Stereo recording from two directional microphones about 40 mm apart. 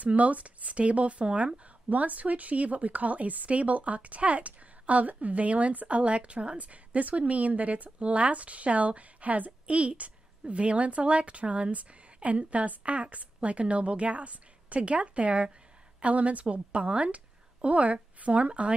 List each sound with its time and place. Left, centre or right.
0.0 s speech: right
1.9 s a woman's voice: right